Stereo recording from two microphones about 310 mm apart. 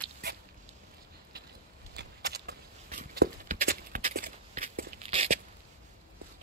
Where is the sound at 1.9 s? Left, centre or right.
Right.